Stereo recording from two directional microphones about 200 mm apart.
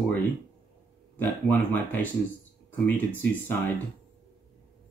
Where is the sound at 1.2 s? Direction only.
10° left (ahead or behind).